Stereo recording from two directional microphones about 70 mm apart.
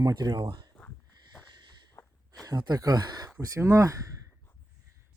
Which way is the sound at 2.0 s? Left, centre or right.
Left.